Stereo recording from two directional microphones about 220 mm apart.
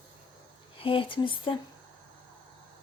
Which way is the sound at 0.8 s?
25° left (ahead or behind).